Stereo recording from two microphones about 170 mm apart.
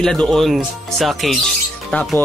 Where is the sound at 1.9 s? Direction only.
5° left (ahead or behind).